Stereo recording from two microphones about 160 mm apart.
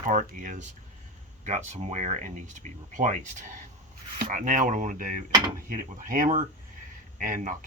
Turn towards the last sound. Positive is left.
turn(degrees=-55)  # may be behind; listen again after turning